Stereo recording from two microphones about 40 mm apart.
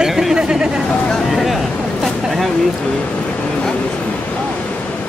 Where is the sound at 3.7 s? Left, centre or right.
Left.